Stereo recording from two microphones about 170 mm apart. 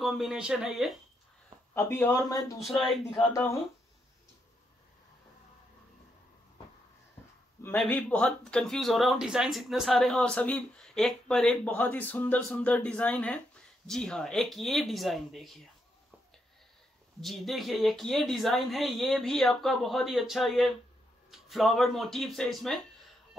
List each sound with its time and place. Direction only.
0.0 s speech: centre (ahead or behind)
1.7 s speech: 15° left (ahead or behind)
2.8 s speech: centre (ahead or behind)
7.8 s speech: 5° left (ahead or behind)
17.2 s speech: centre (ahead or behind)